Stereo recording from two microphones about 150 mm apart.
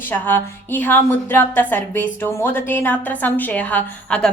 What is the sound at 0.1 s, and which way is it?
A woman's voice, 10° left (ahead or behind).